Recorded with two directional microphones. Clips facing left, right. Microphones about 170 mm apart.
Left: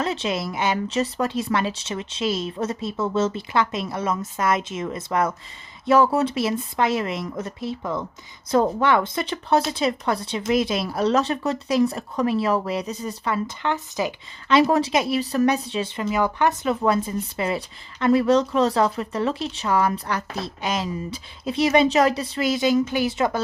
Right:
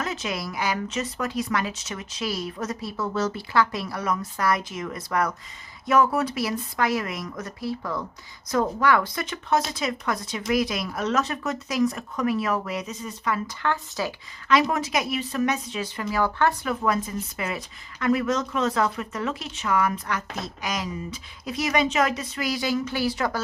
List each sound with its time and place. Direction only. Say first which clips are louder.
0.0 s speech: left 5 dB; 30° left (ahead or behind)